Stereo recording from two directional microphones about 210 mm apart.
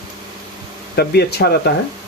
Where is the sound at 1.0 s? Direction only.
50° left (ahead or behind).